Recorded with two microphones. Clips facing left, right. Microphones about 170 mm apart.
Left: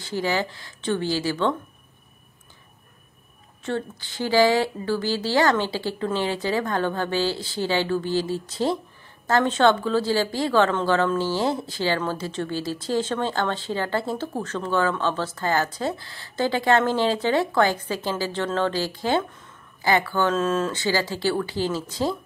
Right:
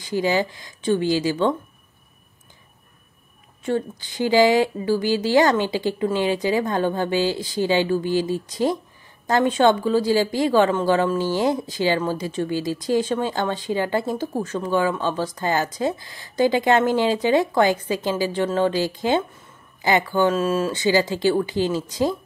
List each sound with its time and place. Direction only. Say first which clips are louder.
0.0 s speech: right 4 dB; 15° right (ahead or behind)
3.6 s speech: right 4 dB; 15° right (ahead or behind)